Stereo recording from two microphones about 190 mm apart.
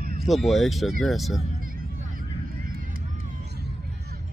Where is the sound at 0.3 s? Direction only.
Centre (ahead or behind).